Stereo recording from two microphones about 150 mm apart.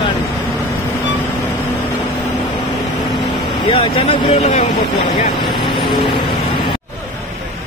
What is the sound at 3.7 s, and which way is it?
Speech, 35° left (ahead or behind).